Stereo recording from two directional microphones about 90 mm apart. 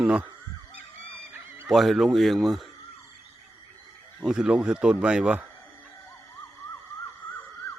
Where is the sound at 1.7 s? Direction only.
Centre (ahead or behind).